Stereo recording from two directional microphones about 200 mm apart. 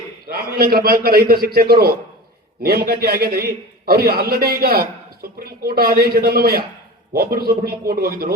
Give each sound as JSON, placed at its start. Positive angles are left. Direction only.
{"t": 0.3, "sound": "a man's voice", "side_deg": -50}